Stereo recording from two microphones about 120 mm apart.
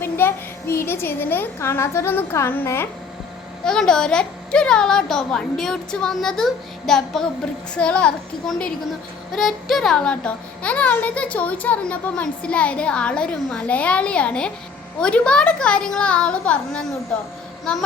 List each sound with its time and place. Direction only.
0.0 s a woman's voice: 20° left (ahead or behind)
3.6 s a woman's voice: 5° left (ahead or behind)